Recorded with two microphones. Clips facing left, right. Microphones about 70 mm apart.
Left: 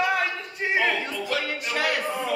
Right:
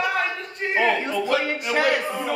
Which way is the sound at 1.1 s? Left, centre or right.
Right.